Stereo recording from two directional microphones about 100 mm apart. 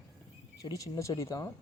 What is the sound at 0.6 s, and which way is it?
Speech, 40° left (ahead or behind).